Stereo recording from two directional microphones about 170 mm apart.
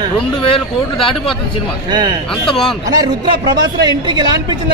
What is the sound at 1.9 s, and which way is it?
Speech, 25° right (ahead or behind).